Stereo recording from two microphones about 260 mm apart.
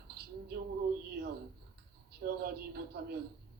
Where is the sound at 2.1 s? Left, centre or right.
Right.